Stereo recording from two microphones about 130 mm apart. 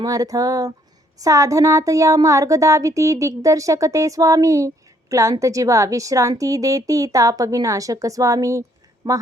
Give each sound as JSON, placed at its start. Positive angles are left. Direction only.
{"t": 0.0, "sound": "speech", "side_deg": -30}